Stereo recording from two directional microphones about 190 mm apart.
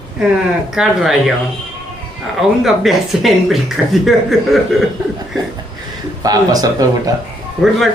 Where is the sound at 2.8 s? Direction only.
Centre (ahead or behind).